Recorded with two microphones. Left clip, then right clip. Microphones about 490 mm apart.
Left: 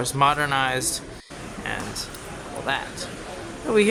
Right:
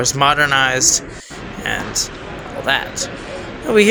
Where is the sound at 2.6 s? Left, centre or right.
Left.